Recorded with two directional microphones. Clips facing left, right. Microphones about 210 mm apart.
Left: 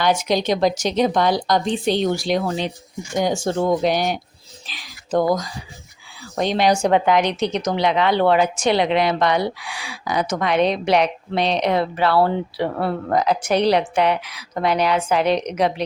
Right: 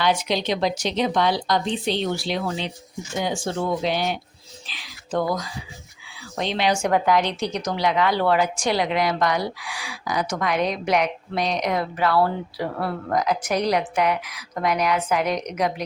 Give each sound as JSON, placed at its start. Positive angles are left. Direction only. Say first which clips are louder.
{"t": 0.0, "sound": "a woman's voice", "louder": "left 3 dB", "side_deg": 45}
{"t": 6.9, "sound": "a woman's voice", "louder": "left 3 dB", "side_deg": 20}